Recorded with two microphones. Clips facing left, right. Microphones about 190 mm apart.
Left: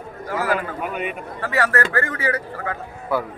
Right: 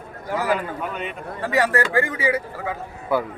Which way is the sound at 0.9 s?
10° left (ahead or behind).